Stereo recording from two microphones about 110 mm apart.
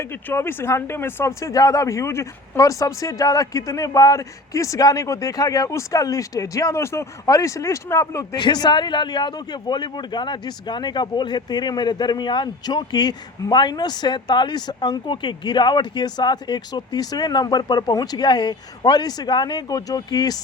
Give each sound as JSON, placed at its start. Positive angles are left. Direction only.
{"t": 0.0, "sound": "speech", "side_deg": 20}
{"t": 8.4, "sound": "a man's voice", "side_deg": 40}